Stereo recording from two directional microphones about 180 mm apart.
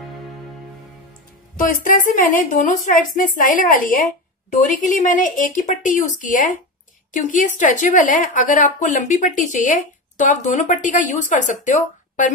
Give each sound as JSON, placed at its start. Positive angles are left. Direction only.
{"t": 1.6, "sound": "a woman's voice", "side_deg": 50}